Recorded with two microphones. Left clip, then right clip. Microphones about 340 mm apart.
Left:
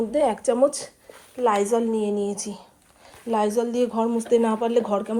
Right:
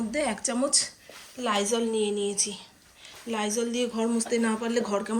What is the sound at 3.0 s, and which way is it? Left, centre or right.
Speech, centre.